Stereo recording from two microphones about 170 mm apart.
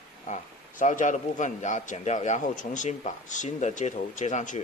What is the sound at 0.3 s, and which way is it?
A man's voice, 50° left (ahead or behind).